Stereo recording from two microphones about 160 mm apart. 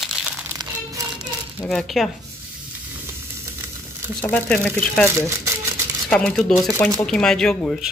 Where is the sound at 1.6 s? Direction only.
Centre (ahead or behind).